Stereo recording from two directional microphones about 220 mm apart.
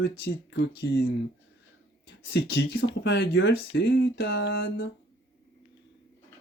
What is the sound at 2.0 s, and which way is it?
Speech, 50° left (ahead or behind).